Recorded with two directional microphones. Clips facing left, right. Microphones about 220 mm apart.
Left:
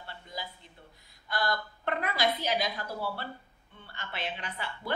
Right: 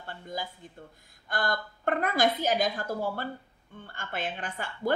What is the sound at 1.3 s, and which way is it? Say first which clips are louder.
A woman's voice: right 1 dB; 50° right (ahead or behind).